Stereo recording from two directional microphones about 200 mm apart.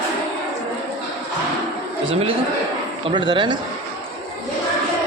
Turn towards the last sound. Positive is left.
turn(degrees=-25)  # may be behind; listen again after turning